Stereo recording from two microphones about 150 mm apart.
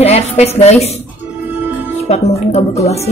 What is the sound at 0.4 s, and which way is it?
Speech, 45° left (ahead or behind).